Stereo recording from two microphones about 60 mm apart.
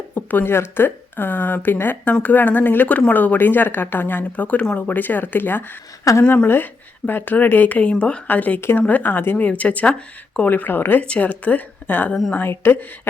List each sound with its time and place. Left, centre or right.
0.1 s a woman's voice: left
6.1 s speech: left
7.1 s speech: left
11.0 s speech: centre
11.3 s a woman's voice: left